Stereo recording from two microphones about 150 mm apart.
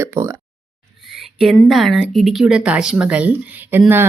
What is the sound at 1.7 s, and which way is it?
Speech, centre (ahead or behind).